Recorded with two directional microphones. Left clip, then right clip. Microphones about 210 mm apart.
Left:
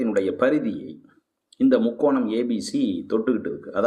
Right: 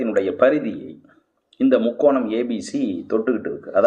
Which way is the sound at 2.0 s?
35° left (ahead or behind).